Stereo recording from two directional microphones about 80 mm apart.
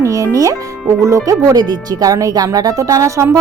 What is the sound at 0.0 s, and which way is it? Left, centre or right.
Music, right.